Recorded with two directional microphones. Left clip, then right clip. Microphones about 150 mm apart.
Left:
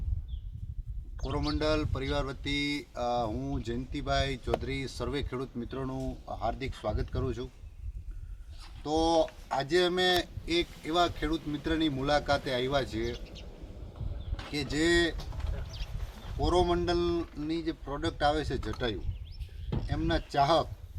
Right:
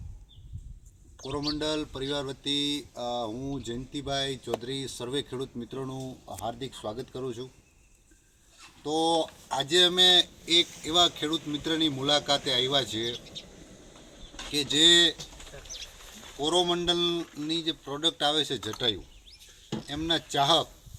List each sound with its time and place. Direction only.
1.3 s speech: 5° right (ahead or behind)
8.8 s speech: 5° right (ahead or behind)
14.5 s speech: 5° right (ahead or behind)
15.7 s a sound: 45° right (ahead or behind)
16.4 s speech: 10° right (ahead or behind)
19.9 s speech: 5° right (ahead or behind)